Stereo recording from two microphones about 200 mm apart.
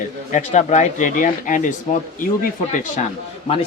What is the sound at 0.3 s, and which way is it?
Speech, 35° left (ahead or behind).